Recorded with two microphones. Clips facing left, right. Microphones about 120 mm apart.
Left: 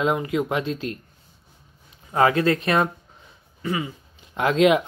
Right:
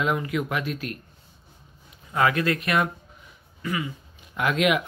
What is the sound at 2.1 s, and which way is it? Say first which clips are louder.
Speech: left 4 dB; 30° left (ahead or behind).